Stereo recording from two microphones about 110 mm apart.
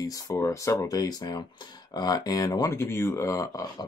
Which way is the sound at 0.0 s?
30° left (ahead or behind).